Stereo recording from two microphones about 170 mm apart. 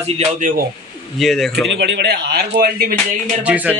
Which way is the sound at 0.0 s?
45° right (ahead or behind).